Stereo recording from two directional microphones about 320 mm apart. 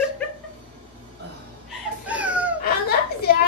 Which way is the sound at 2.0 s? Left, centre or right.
Centre.